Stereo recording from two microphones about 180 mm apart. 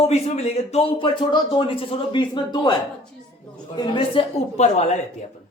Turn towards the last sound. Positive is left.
turn(degrees=40)  # may be behind; listen again after turning